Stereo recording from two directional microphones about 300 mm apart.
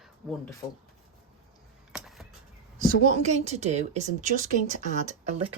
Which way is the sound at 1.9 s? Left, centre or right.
Centre.